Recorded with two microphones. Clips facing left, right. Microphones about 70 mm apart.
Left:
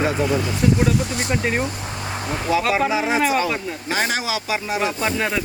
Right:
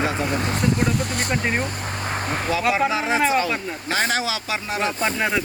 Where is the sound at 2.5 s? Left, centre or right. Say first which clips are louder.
Left 2 dB; centre.